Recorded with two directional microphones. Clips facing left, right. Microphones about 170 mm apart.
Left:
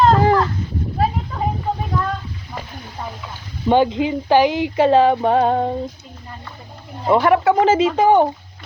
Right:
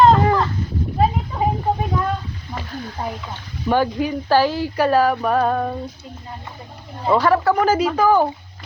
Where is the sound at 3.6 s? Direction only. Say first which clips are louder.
Left 3 dB; 20° left (ahead or behind).